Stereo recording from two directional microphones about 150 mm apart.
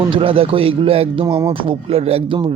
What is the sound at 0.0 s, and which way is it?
Speech, 35° right (ahead or behind).